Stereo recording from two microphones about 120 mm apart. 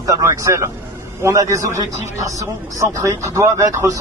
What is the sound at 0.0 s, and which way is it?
Speech, 25° right (ahead or behind).